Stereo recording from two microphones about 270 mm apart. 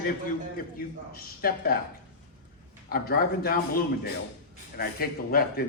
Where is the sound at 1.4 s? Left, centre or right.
Left.